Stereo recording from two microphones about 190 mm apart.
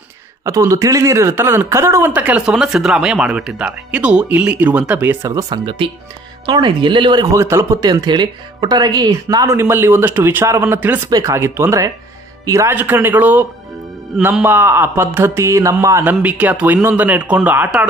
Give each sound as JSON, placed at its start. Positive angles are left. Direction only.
{"t": 0.5, "sound": "speech", "side_deg": -15}